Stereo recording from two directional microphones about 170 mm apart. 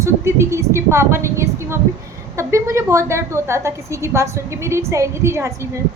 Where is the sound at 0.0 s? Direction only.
15° right (ahead or behind).